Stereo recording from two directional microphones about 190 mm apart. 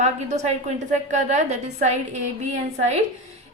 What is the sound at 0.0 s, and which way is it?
A woman's voice, 35° right (ahead or behind).